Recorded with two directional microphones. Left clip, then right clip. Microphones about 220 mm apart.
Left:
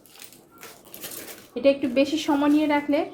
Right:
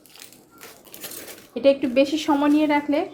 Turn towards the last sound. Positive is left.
turn(degrees=-20)  # may be behind; listen again after turning